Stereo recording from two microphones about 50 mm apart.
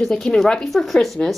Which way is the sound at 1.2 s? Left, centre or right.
Left.